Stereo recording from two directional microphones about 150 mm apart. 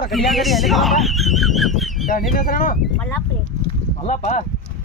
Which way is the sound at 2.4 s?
65° left (ahead or behind).